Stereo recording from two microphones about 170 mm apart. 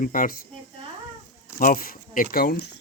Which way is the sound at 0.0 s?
55° left (ahead or behind).